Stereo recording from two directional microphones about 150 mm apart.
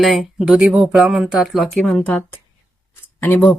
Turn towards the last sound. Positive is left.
turn(degrees=10)  # may be behind; listen again after turning